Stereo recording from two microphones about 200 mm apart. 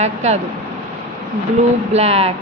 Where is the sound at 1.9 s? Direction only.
30° right (ahead or behind).